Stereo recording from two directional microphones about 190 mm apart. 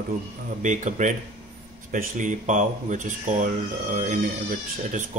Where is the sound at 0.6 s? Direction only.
40° right (ahead or behind).